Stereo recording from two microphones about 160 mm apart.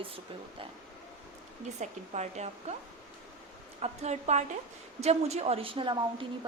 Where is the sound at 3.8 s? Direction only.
45° right (ahead or behind).